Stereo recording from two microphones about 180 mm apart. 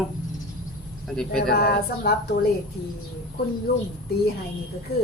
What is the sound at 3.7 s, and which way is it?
Speech, 60° left (ahead or behind).